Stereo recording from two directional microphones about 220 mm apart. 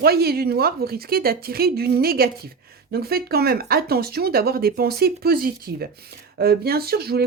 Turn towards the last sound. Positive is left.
turn(degrees=-45)  # may be behind; listen again after turning